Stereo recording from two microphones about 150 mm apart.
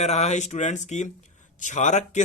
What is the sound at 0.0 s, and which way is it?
Speech, 45° left (ahead or behind).